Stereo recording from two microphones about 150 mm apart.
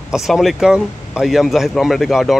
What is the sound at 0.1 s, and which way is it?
Speech, centre (ahead or behind).